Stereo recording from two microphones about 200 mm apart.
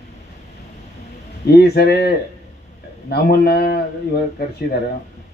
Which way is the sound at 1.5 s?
55° left (ahead or behind).